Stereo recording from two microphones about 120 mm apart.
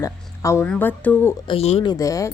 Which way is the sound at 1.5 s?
55° left (ahead or behind).